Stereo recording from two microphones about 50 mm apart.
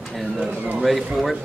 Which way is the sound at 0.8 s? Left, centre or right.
Centre.